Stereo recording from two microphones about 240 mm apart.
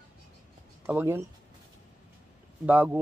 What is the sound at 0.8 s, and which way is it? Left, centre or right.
Speech, centre.